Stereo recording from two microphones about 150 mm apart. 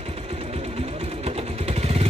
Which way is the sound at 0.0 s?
40° right (ahead or behind).